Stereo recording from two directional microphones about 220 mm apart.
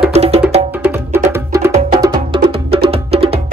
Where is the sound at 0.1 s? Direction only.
30° right (ahead or behind).